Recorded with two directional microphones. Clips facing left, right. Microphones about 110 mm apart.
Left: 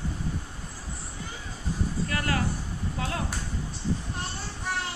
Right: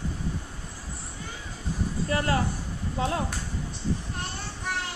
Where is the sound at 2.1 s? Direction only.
30° right (ahead or behind).